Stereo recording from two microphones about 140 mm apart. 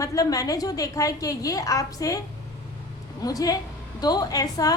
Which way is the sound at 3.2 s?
25° left (ahead or behind).